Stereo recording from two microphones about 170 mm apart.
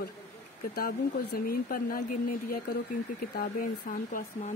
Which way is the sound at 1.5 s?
60° left (ahead or behind).